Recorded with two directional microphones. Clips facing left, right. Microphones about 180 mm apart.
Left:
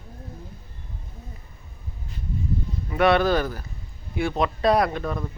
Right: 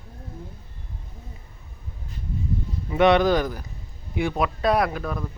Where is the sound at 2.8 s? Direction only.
20° right (ahead or behind).